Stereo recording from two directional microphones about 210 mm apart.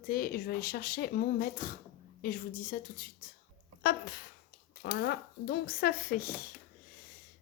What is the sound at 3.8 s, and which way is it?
Speech, 45° left (ahead or behind).